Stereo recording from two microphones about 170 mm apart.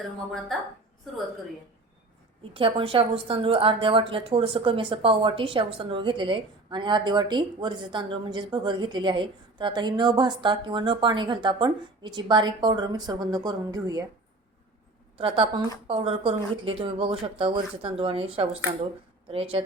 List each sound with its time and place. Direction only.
0.3 s a woman's voice: centre (ahead or behind)
2.4 s a woman's voice: 30° right (ahead or behind)
15.2 s speech: 30° right (ahead or behind)